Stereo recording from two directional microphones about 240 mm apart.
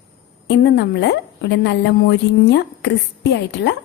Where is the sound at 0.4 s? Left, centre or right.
Left.